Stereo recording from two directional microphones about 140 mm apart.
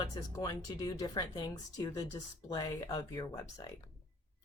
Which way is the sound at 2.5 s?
25° left (ahead or behind).